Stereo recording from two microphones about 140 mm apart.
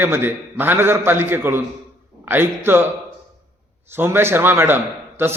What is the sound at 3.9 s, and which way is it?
A man's voice, 15° right (ahead or behind).